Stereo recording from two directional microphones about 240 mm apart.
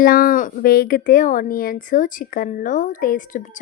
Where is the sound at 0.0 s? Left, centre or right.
Left.